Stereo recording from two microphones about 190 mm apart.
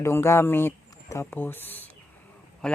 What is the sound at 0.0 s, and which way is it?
A man's voice, 15° left (ahead or behind).